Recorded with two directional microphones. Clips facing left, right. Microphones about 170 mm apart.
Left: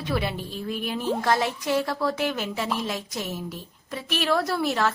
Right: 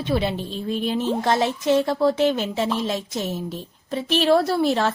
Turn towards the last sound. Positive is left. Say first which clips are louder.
# right 4 dB
turn(degrees=-30)  # may be behind; listen again after turning